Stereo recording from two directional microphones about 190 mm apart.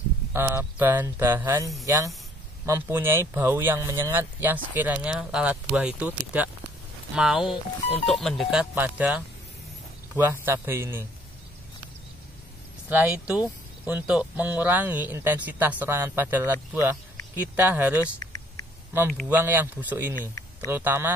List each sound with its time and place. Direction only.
0.3 s speech: 10° right (ahead or behind)
12.9 s speech: 10° right (ahead or behind)
19.2 s speech: 10° right (ahead or behind)